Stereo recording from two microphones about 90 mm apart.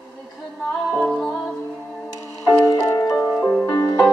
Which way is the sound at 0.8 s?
Centre (ahead or behind).